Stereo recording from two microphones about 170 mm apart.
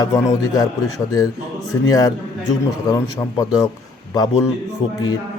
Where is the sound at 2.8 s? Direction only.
20° left (ahead or behind).